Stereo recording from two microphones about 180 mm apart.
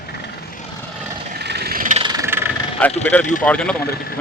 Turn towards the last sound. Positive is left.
turn(degrees=5)  # may be behind; listen again after turning